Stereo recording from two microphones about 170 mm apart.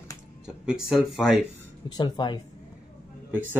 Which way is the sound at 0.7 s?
5° right (ahead or behind).